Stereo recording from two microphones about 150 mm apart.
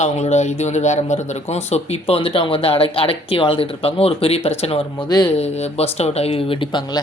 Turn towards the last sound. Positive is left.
turn(degrees=35)  # may be behind; listen again after turning